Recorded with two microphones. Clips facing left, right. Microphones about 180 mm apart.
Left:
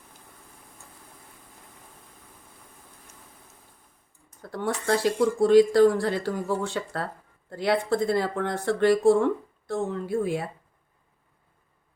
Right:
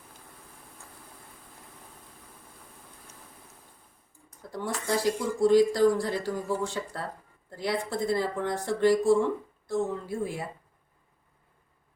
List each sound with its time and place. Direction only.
4.5 s speech: 65° left (ahead or behind)